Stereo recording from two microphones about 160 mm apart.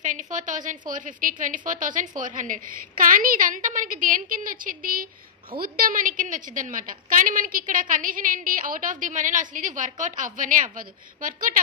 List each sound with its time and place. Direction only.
0.0 s a woman's voice: 50° right (ahead or behind)